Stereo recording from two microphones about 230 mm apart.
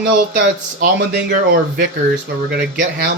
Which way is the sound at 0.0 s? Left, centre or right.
Right.